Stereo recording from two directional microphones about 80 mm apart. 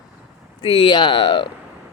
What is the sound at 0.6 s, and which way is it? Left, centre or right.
Speech, left.